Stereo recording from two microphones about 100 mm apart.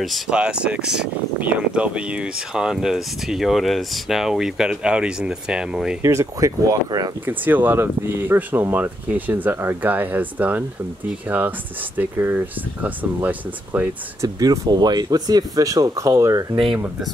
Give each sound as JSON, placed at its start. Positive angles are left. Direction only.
{"t": 0.3, "sound": "speech", "side_deg": -10}
{"t": 6.0, "sound": "speech", "side_deg": -30}
{"t": 7.2, "sound": "speech", "side_deg": -20}
{"t": 14.2, "sound": "speech", "side_deg": -35}